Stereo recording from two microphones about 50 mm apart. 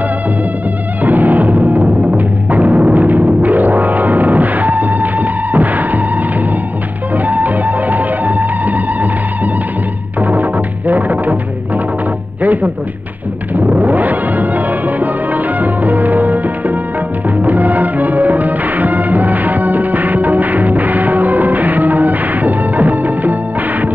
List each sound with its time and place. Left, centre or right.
1.0 s music: right
7.2 s music: right
10.9 s music: right
12.4 s music: right